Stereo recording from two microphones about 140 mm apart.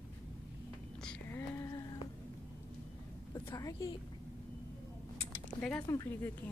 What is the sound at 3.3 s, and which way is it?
Speech, 25° left (ahead or behind).